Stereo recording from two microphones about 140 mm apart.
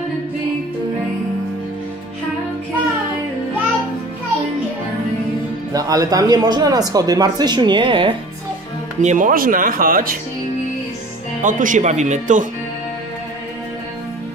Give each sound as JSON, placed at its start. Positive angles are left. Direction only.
{"t": 5.7, "sound": "speech", "side_deg": -25}
{"t": 9.0, "sound": "speech", "side_deg": -65}
{"t": 11.4, "sound": "speech", "side_deg": -70}